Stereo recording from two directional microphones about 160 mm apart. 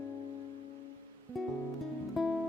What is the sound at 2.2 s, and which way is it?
Music, centre (ahead or behind).